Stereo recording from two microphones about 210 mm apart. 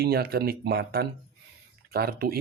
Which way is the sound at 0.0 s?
45° right (ahead or behind).